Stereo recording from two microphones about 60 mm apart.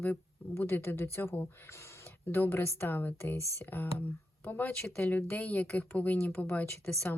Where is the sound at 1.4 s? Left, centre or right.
Left.